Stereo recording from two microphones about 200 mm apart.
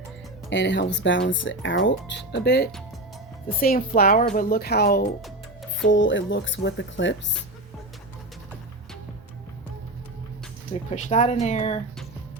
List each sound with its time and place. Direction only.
0.5 s speech: 60° left (ahead or behind)
3.6 s speech: 45° left (ahead or behind)
5.8 s speech: 70° left (ahead or behind)
10.9 s speech: 35° left (ahead or behind)